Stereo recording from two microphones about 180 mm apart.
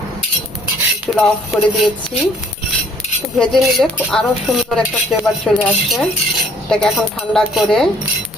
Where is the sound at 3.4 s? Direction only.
Centre (ahead or behind).